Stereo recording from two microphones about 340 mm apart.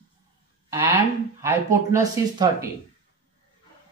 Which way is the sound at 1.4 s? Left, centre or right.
Centre.